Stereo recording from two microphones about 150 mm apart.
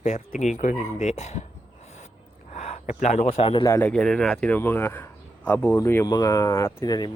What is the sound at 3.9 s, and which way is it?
Speech, 5° left (ahead or behind).